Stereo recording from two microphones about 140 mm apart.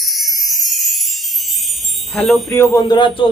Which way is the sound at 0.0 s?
Centre (ahead or behind).